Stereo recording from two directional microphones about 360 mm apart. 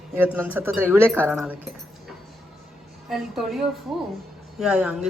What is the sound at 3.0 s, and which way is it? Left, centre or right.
Speech, centre.